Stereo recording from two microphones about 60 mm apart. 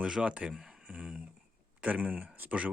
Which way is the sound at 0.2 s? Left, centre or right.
Centre.